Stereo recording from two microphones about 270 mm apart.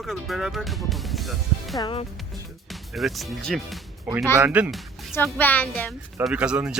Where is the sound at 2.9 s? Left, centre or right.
Centre.